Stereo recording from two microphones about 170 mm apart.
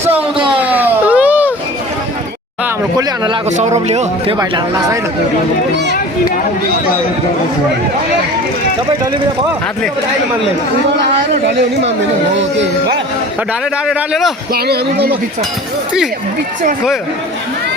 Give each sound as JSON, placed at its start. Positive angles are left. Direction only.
{"t": 0.3, "sound": "a sound", "side_deg": -30}
{"t": 0.6, "sound": "a sound", "side_deg": -10}
{"t": 3.6, "sound": "speech", "side_deg": -40}
{"t": 4.4, "sound": "speech", "side_deg": -20}
{"t": 13.8, "sound": "speech", "side_deg": 0}
{"t": 14.5, "sound": "speech", "side_deg": -70}